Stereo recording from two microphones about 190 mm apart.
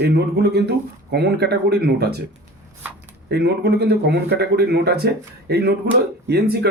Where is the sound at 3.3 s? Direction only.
60° right (ahead or behind).